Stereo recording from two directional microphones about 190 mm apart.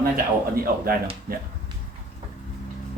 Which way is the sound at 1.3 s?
50° right (ahead or behind).